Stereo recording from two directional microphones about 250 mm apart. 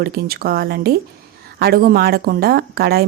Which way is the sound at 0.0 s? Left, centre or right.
Right.